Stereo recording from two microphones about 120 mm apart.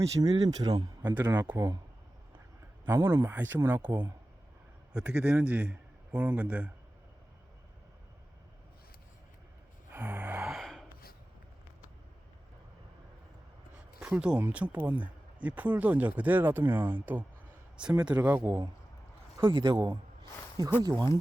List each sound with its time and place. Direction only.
0.2 s speech: 35° right (ahead or behind)
1.1 s speech: 15° right (ahead or behind)
1.5 s speech: 25° right (ahead or behind)
2.8 s a man's voice: 20° right (ahead or behind)
9.9 s music: 15° right (ahead or behind)
10.5 s gasp: centre (ahead or behind)
14.0 s speech: 10° right (ahead or behind)
19.4 s speech: 40° right (ahead or behind)